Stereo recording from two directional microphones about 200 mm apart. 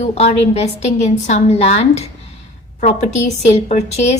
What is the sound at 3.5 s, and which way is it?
Speech, 30° left (ahead or behind).